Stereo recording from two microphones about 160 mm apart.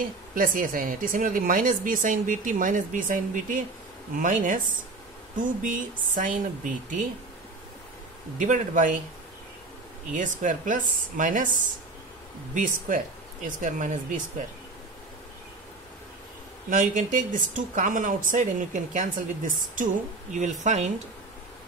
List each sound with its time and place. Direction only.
0.0 s speech: 60° right (ahead or behind)
8.4 s speech: 50° right (ahead or behind)
10.1 s speech: 55° right (ahead or behind)
16.7 s speech: 55° right (ahead or behind)